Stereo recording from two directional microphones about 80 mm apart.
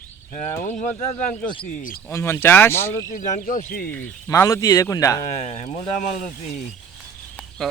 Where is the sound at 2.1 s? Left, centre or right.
Left.